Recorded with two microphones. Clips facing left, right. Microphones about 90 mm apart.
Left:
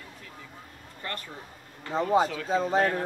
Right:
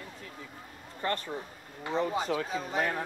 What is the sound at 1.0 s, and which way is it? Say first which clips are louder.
Speech: right 5 dB; 30° right (ahead or behind).